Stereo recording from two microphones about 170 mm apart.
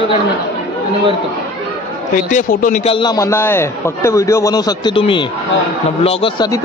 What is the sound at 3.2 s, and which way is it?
A man's voice, 15° left (ahead or behind).